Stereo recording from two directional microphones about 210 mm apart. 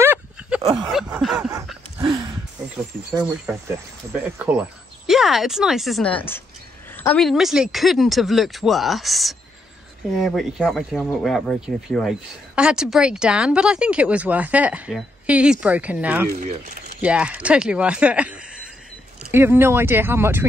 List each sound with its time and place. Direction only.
0.0 s a sound: 10° right (ahead or behind)
0.8 s speech: 5° right (ahead or behind)
3.5 s speech: 5° right (ahead or behind)
5.0 s speech: centre (ahead or behind)
16.3 s speech: 40° right (ahead or behind)
17.0 s speech: 5° right (ahead or behind)